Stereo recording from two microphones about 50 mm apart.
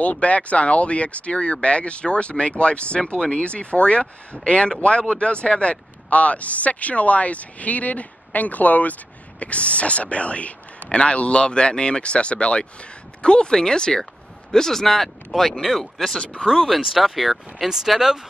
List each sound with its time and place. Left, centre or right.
0.0 s speech: left; by 18.2 s centre